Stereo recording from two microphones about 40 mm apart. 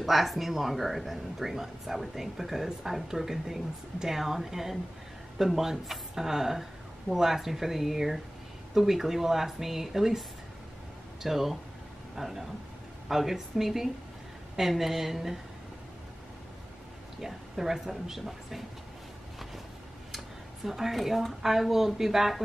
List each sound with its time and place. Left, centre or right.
0.0 s speech: centre
11.2 s speech: centre
17.2 s speech: centre
20.6 s speech: centre